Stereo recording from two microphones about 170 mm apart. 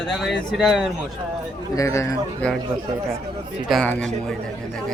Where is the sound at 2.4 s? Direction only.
10° left (ahead or behind).